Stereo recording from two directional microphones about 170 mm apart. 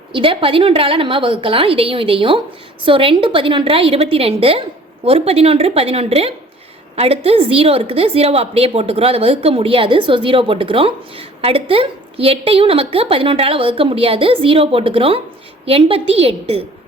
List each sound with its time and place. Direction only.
0.1 s a woman's voice: 30° right (ahead or behind)